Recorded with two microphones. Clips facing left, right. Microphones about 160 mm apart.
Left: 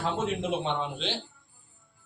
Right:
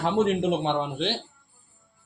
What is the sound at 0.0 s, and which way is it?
A man's voice, 65° right (ahead or behind).